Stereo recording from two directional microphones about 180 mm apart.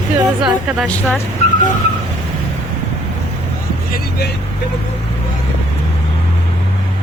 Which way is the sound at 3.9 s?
65° left (ahead or behind).